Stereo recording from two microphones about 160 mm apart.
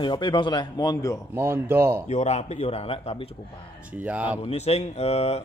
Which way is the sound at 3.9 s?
10° right (ahead or behind).